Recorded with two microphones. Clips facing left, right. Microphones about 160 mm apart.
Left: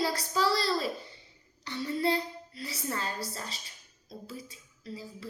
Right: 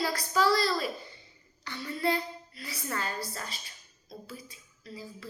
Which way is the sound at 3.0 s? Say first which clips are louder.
Even; 30° left (ahead or behind).